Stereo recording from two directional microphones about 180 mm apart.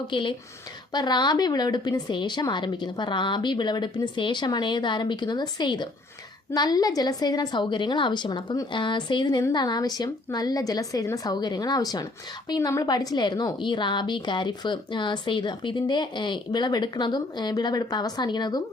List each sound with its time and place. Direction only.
0.1 s a woman's voice: 25° left (ahead or behind)